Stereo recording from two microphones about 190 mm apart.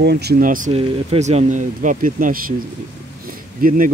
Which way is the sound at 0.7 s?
30° right (ahead or behind).